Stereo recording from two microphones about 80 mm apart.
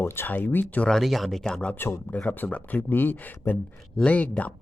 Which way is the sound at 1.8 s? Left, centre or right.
Left.